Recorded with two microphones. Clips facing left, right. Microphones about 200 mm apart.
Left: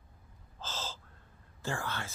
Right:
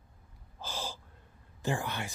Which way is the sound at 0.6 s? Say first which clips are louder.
Right 2 dB; 15° right (ahead or behind).